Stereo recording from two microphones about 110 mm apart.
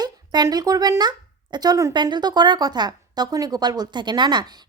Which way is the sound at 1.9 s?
45° right (ahead or behind).